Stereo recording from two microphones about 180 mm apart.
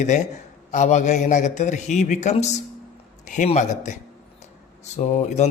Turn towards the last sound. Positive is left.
turn(degrees=40)  # may be behind; listen again after turning